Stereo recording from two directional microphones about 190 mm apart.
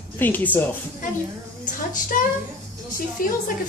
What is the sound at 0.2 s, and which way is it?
Speech, 10° left (ahead or behind).